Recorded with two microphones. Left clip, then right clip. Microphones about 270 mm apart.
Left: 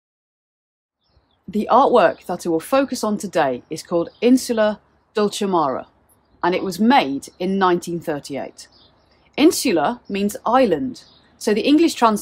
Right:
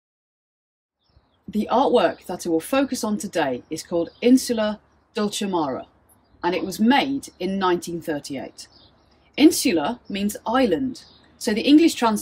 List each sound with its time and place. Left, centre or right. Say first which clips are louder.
1.5 s speech: left 5 dB; centre